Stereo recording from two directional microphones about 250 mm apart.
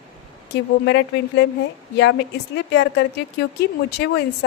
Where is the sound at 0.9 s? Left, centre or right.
Left.